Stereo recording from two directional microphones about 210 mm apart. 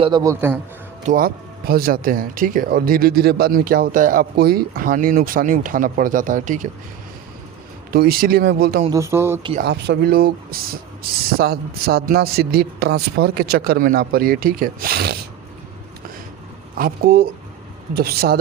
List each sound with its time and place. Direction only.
0.0 s a man's voice: 20° right (ahead or behind)
1.0 s speech: 40° right (ahead or behind)
7.9 s speech: 45° right (ahead or behind)
8.9 s a man's voice: 15° right (ahead or behind)
9.6 s speech: 55° right (ahead or behind)
16.7 s speech: 45° right (ahead or behind)